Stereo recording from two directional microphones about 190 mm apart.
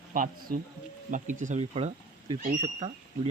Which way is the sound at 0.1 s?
45° right (ahead or behind).